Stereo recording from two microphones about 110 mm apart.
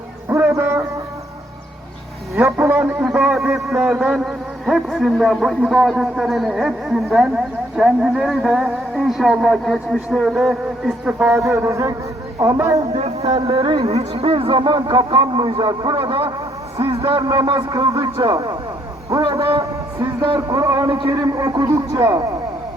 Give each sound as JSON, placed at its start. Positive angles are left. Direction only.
{"t": 0.3, "sound": "a sound", "side_deg": -25}
{"t": 2.4, "sound": "a man's voice", "side_deg": -15}
{"t": 11.3, "sound": "speech", "side_deg": -25}
{"t": 12.9, "sound": "speech", "side_deg": -70}
{"t": 13.4, "sound": "a man's voice", "side_deg": -55}
{"t": 13.8, "sound": "a man's voice", "side_deg": -70}
{"t": 16.7, "sound": "a sound", "side_deg": -55}
{"t": 17.2, "sound": "speech", "side_deg": -40}
{"t": 17.7, "sound": "speech", "side_deg": -30}